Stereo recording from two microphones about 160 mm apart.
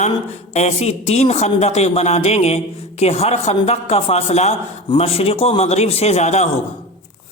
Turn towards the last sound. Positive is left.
turn(degrees=45)  # may be behind; listen again after turning